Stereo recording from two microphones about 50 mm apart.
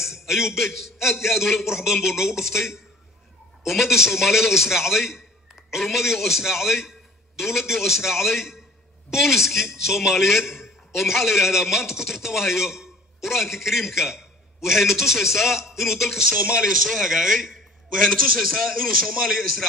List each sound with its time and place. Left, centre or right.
0.0 s a man's voice: centre
16.3 s a man's voice: right
16.7 s a man's voice: centre